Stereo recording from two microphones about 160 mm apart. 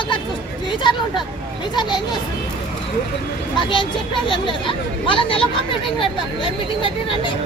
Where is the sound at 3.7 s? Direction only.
30° left (ahead or behind).